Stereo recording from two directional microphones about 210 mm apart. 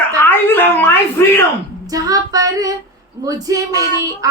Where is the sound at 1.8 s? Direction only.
15° right (ahead or behind).